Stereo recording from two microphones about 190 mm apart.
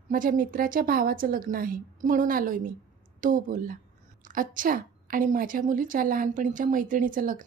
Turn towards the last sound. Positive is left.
turn(degrees=-45)  # may be behind; listen again after turning